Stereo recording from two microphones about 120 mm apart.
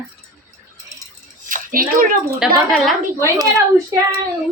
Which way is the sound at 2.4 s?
Centre (ahead or behind).